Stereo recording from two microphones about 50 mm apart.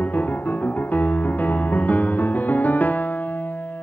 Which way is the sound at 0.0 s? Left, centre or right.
Left.